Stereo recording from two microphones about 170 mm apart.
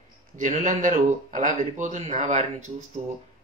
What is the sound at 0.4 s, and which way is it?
A man's voice, 50° right (ahead or behind).